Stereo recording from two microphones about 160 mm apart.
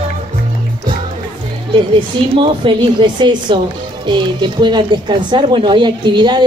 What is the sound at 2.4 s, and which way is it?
Speech, 30° right (ahead or behind).